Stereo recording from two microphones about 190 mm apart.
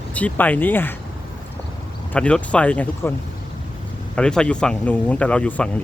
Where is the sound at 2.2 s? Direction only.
5° left (ahead or behind).